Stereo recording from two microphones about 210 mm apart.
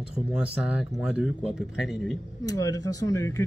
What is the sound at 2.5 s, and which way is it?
Speech, 15° left (ahead or behind).